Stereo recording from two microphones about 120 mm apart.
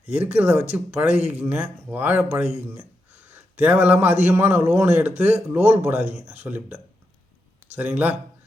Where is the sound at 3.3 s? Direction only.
15° right (ahead or behind).